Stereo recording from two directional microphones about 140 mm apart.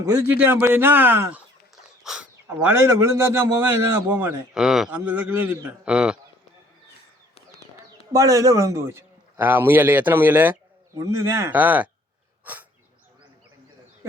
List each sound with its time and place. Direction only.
0.0 s speech: 15° right (ahead or behind)
4.5 s a man's voice: 5° right (ahead or behind)
8.1 s a man's voice: 25° right (ahead or behind)
10.9 s speech: 25° right (ahead or behind)